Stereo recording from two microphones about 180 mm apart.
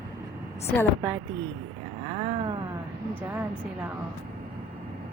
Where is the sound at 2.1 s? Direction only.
30° right (ahead or behind).